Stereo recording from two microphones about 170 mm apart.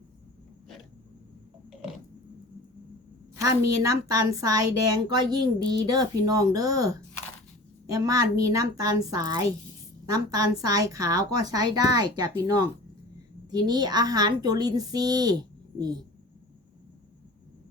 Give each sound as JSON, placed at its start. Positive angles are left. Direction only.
{"t": 3.4, "sound": "a woman's voice", "side_deg": -20}